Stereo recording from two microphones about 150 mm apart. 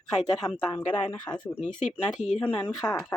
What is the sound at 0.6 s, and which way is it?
Speech, 10° left (ahead or behind).